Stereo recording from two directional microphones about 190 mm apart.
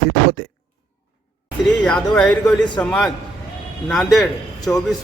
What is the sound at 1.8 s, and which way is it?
A man's voice, 5° left (ahead or behind).